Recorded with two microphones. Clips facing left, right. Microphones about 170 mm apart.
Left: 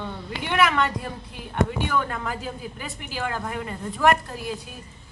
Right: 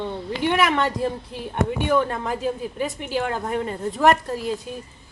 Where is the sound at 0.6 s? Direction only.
25° right (ahead or behind).